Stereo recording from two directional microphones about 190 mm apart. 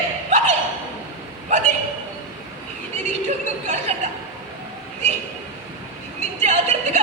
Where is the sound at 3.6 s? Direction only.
40° right (ahead or behind).